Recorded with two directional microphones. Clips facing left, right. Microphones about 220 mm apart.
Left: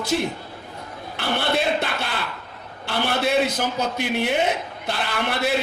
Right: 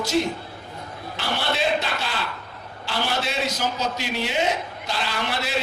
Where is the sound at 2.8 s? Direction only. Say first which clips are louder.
Left 4 dB; 55° left (ahead or behind).